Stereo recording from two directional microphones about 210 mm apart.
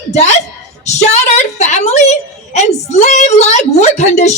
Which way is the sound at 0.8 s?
35° left (ahead or behind).